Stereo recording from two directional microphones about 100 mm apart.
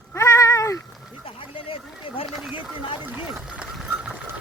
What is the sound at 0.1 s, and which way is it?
Cat, 30° left (ahead or behind).